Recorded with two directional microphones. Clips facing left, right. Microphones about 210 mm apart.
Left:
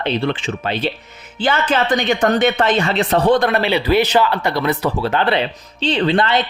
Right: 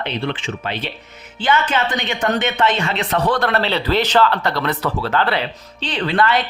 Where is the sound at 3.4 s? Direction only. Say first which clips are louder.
Left 2 dB; 15° left (ahead or behind).